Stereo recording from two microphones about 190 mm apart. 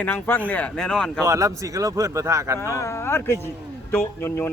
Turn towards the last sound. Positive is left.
turn(degrees=10)  # may be behind; listen again after turning